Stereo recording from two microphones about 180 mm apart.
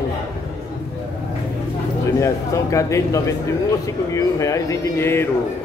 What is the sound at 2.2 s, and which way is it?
Speech, 15° left (ahead or behind).